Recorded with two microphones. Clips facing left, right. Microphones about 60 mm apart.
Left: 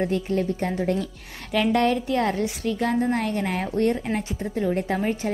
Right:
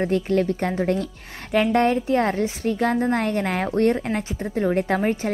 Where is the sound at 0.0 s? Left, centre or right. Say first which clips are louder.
Right 3 dB; right.